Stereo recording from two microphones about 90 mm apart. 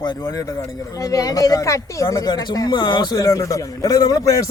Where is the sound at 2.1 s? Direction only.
45° left (ahead or behind).